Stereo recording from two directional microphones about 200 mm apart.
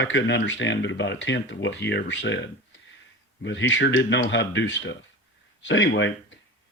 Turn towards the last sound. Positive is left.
turn(degrees=65)  # may be behind; listen again after turning